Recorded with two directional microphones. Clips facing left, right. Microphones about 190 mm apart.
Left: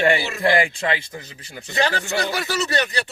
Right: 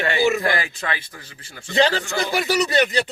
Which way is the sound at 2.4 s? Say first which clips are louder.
Right 4 dB; 20° right (ahead or behind).